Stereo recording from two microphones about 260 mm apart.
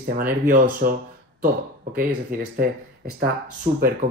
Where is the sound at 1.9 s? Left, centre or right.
Right.